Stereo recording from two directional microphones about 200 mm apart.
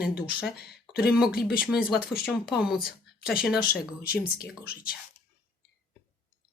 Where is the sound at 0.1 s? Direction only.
50° left (ahead or behind).